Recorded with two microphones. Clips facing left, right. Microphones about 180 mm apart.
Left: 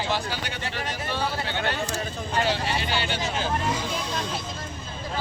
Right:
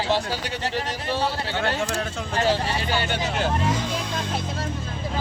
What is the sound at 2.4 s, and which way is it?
Speech, 40° right (ahead or behind).